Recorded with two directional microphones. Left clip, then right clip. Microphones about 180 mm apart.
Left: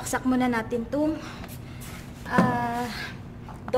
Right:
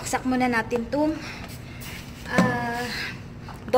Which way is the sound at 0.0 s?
10° left (ahead or behind).